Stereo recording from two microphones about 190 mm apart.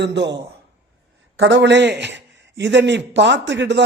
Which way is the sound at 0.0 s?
65° right (ahead or behind).